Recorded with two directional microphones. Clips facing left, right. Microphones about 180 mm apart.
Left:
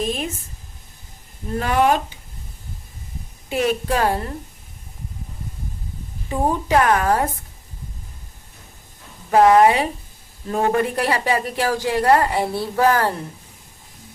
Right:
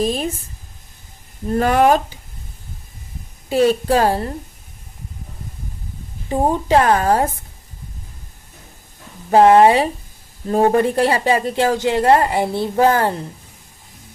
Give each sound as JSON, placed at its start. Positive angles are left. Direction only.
{"t": 0.0, "sound": "a woman's voice", "side_deg": -35}
{"t": 1.5, "sound": "speech", "side_deg": -45}
{"t": 3.5, "sound": "a woman's voice", "side_deg": -35}
{"t": 6.2, "sound": "a woman's voice", "side_deg": -30}
{"t": 9.3, "sound": "a woman's voice", "side_deg": -30}